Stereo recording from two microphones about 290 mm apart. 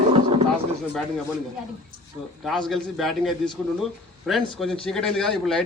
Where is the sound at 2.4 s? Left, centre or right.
Centre.